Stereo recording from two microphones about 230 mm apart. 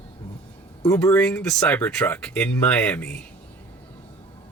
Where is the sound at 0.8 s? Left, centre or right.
Centre.